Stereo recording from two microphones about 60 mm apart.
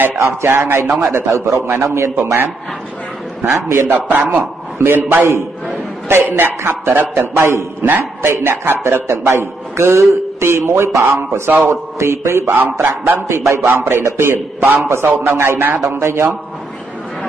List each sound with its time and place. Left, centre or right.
0.5 s speech: right
1.1 s a man's voice: right
3.9 s a man's voice: right
4.4 s a man's voice: right
11.1 s speech: right
11.7 s a man's voice: right
15.6 s speech: right
16.0 s a man's voice: right